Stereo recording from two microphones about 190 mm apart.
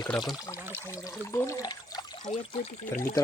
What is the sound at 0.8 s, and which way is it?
Speech, 15° left (ahead or behind).